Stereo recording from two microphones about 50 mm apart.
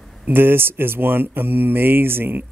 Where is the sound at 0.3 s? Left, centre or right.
Right.